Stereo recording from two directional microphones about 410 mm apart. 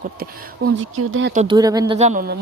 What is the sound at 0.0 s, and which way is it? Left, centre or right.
Speech, right.